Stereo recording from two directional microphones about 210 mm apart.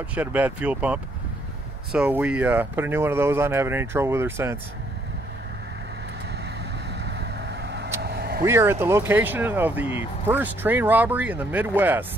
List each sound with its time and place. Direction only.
0.1 s speech: 5° right (ahead or behind)
7.1 s vehicle: 55° right (ahead or behind)
8.5 s speech: 10° right (ahead or behind)